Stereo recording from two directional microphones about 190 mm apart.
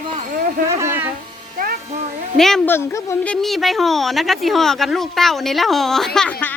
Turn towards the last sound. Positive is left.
turn(degrees=5)  # may be behind; listen again after turning